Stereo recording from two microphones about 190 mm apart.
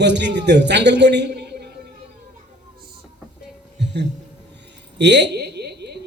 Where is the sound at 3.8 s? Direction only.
65° right (ahead or behind).